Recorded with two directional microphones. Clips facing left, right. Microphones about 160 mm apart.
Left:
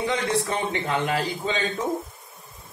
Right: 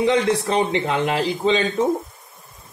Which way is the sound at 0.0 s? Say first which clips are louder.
Right 6 dB; 90° right.